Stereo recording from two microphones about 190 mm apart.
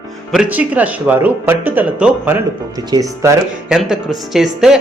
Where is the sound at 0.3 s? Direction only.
5° right (ahead or behind).